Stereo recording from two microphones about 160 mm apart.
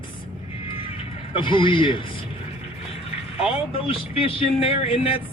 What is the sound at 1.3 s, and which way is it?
Speech, 30° left (ahead or behind).